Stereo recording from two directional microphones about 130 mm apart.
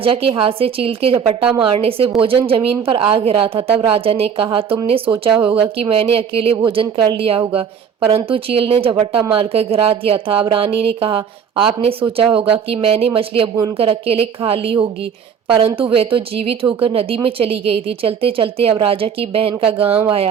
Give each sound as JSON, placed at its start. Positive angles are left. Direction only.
{"t": 0.0, "sound": "a woman's voice", "side_deg": -45}